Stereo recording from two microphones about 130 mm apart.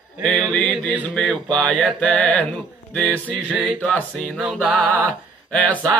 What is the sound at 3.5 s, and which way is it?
Music, centre (ahead or behind).